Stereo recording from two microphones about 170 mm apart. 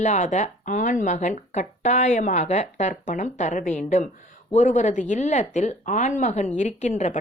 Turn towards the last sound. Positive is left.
turn(degrees=45)  # may be behind; listen again after turning